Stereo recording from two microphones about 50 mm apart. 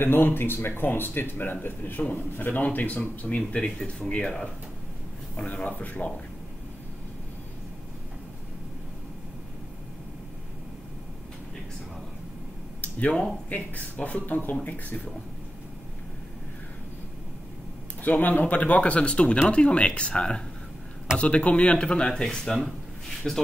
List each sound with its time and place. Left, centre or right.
0.0 s a man's voice: left; by 4.5 s centre
5.3 s a man's voice: left
13.5 s speech: left
18.0 s speech: left; by 23.4 s centre